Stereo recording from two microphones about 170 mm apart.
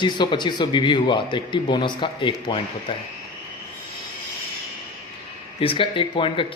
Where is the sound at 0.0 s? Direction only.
25° left (ahead or behind).